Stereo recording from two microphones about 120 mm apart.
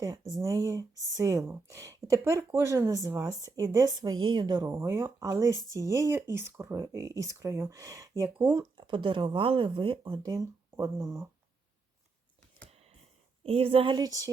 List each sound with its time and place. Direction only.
0.3 s speech: 25° right (ahead or behind)
4.9 s speech: 20° right (ahead or behind)
8.8 s speech: 40° right (ahead or behind); by 11.3 s 25° right (ahead or behind)
13.4 s a woman's voice: 55° right (ahead or behind)
13.9 s speech: 30° right (ahead or behind)